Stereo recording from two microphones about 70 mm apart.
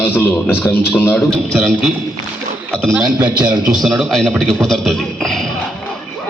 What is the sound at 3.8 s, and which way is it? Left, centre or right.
A man's voice, centre.